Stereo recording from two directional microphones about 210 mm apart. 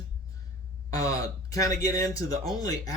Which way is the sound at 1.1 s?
15° left (ahead or behind).